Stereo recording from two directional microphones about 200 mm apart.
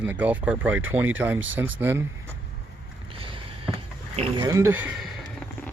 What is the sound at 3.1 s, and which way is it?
Rowboat, 25° right (ahead or behind).